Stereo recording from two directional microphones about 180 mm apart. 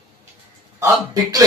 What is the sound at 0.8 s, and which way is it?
Speech, 20° right (ahead or behind).